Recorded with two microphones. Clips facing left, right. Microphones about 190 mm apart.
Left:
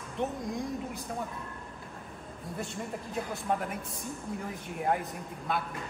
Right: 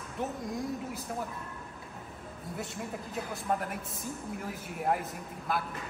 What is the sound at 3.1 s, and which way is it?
A man's voice, centre (ahead or behind).